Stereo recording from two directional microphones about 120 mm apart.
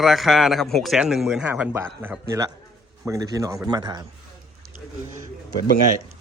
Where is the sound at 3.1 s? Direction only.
30° right (ahead or behind).